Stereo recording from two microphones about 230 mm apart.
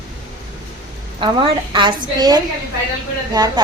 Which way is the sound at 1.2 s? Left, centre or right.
Right.